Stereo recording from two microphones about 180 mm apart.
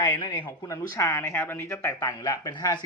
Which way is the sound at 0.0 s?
15° left (ahead or behind).